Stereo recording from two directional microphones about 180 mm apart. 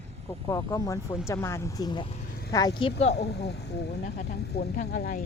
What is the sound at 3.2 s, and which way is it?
Speech, 65° left (ahead or behind).